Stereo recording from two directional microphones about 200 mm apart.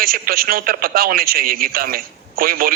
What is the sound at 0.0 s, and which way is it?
Speech, 45° right (ahead or behind).